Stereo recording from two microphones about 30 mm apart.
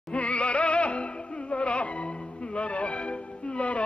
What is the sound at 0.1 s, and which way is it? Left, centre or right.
Music, left.